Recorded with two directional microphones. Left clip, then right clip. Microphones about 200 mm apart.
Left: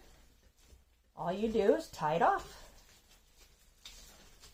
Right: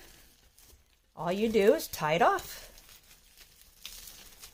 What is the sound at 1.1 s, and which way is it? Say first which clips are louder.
Speech: right 5 dB; 55° right (ahead or behind).